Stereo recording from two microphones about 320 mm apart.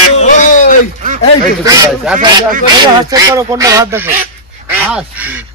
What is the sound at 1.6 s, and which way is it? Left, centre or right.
Quack, centre.